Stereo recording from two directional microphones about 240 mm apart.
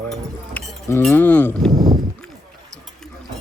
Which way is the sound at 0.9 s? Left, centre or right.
Centre.